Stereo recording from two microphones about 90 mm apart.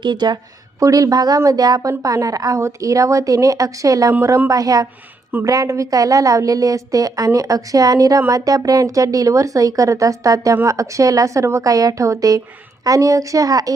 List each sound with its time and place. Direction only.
0.0 s a woman's voice: 55° right (ahead or behind)
0.8 s speech: 40° right (ahead or behind)